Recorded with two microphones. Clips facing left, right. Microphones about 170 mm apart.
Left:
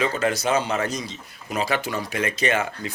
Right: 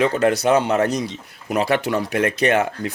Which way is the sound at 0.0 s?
60° right (ahead or behind).